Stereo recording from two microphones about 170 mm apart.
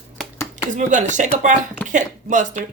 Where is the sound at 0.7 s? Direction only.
45° right (ahead or behind).